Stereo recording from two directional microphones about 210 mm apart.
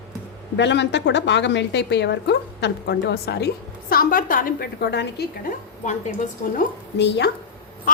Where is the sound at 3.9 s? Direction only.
40° left (ahead or behind).